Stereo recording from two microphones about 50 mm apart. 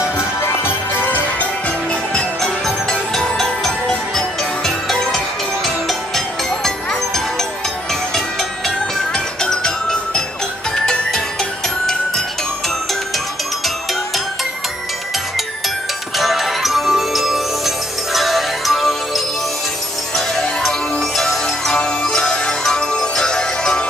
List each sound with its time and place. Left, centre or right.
0.7 s music: left
2.1 s music: centre
8.1 s music: centre
16.2 s music: centre